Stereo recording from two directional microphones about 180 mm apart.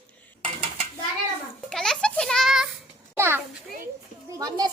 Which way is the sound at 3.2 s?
15° right (ahead or behind).